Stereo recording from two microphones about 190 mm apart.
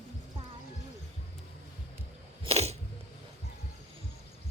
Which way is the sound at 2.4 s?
35° right (ahead or behind).